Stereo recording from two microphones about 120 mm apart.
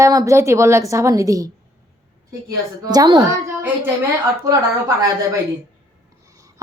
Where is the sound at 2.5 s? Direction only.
30° right (ahead or behind).